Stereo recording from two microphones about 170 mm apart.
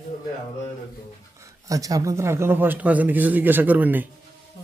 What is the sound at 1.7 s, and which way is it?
A man's voice, 20° right (ahead or behind).